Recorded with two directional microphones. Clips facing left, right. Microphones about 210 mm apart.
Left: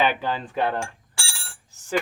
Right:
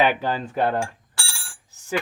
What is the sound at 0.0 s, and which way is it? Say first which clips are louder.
Speech: right 2 dB; 10° right (ahead or behind).